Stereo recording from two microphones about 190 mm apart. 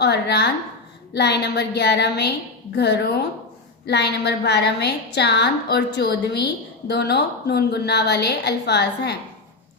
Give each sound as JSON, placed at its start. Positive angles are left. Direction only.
{"t": 0.0, "sound": "a woman's voice", "side_deg": 60}